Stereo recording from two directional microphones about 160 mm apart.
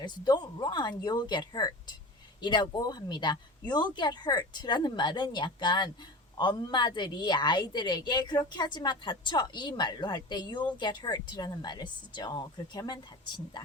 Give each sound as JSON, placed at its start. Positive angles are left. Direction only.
{"t": 0.0, "sound": "a woman's voice", "side_deg": 25}